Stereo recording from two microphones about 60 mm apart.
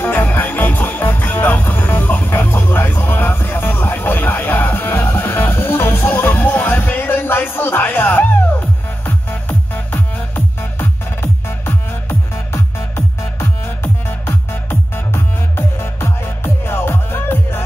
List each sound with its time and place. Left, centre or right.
0.0 s music: left